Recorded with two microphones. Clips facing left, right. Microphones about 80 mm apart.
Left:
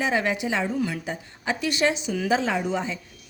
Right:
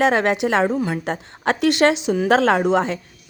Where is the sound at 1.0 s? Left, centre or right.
Right.